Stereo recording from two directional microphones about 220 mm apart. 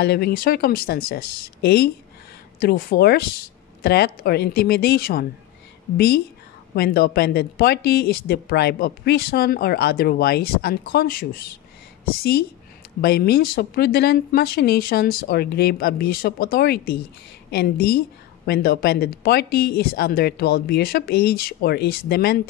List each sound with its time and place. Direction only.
0.0 s a woman's voice: 45° left (ahead or behind)